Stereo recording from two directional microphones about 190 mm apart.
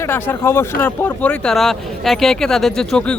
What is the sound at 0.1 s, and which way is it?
Speech, 10° left (ahead or behind).